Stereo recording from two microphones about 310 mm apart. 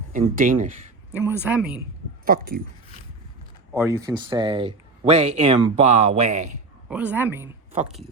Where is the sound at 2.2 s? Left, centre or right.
Right.